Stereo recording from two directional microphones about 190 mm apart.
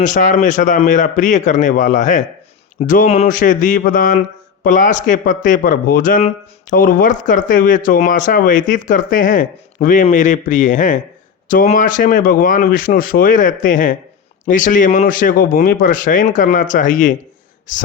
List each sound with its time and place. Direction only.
0.0 s a man's voice: 40° left (ahead or behind)